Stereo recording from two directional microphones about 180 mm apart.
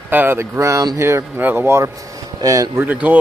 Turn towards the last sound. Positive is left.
turn(degrees=-10)  # may be behind; listen again after turning